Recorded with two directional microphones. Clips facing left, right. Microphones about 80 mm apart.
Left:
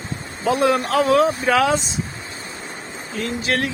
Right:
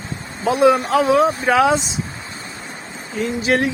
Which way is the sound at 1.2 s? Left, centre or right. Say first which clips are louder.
Right 1 dB; right.